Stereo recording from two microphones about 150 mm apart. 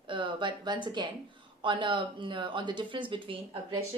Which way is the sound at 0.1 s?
35° right (ahead or behind).